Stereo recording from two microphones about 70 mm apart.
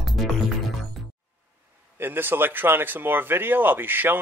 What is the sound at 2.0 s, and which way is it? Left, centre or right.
Speech, right.